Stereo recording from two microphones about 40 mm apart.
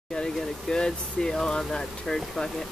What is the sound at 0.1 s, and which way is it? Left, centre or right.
Speech, centre.